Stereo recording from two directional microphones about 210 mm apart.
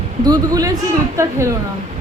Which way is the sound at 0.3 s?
15° right (ahead or behind).